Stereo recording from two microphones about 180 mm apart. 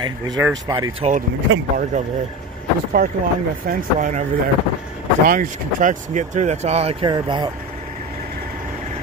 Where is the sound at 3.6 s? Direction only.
45° right (ahead or behind).